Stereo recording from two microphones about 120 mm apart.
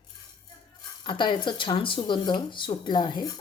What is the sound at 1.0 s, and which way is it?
A woman's voice, 40° left (ahead or behind).